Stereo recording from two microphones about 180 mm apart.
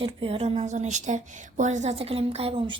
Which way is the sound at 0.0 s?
30° right (ahead or behind).